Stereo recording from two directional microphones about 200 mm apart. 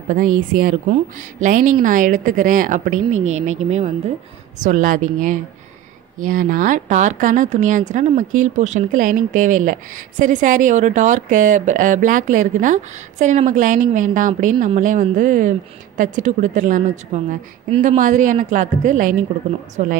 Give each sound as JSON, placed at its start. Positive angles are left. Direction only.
{"t": 0.3, "sound": "a woman's voice", "side_deg": -40}